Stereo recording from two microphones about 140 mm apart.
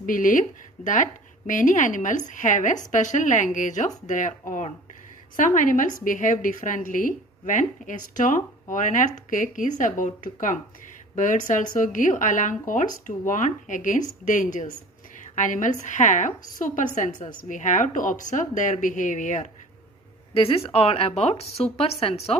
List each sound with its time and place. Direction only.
0.0 s a woman's voice: 75° left (ahead or behind)
20.3 s speech: 45° left (ahead or behind)